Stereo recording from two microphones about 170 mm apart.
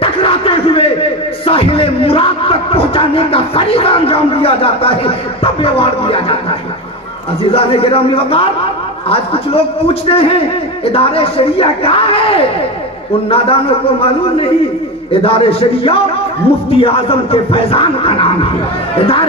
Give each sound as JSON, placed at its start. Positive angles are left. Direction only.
{"t": 0.0, "sound": "a sound", "side_deg": 35}
{"t": 1.5, "sound": "speech", "side_deg": 35}
{"t": 7.5, "sound": "a man's voice", "side_deg": 35}